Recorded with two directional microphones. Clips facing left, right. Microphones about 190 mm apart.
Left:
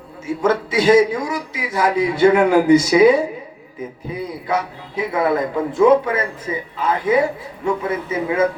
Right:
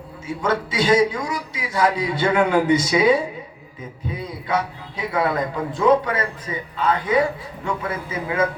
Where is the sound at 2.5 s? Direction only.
25° right (ahead or behind).